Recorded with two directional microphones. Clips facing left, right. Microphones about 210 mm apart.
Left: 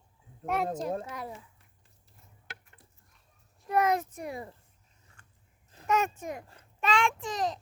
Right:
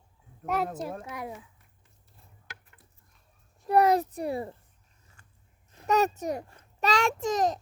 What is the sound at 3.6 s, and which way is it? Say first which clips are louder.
Speech: right 5 dB; 35° right (ahead or behind).